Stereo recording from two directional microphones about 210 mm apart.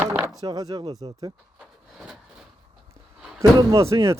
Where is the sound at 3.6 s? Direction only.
15° right (ahead or behind).